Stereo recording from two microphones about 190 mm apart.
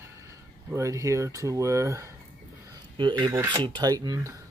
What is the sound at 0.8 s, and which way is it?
Speech, 15° right (ahead or behind).